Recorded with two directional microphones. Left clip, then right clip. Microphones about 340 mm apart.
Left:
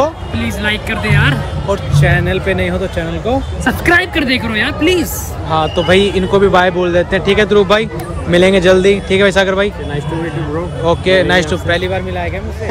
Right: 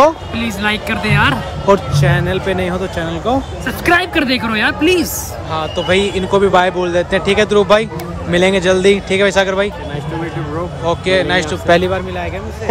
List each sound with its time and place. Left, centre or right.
0.4 s a man's voice: centre
10.9 s a man's voice: centre
11.6 s speech: right